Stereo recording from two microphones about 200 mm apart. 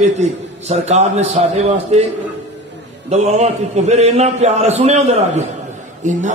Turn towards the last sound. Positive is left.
turn(degrees=-40)  # may be behind; listen again after turning